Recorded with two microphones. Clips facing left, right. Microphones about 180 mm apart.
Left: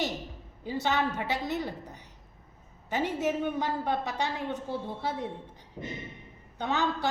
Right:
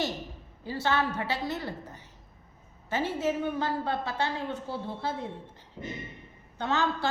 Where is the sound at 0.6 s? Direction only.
20° left (ahead or behind).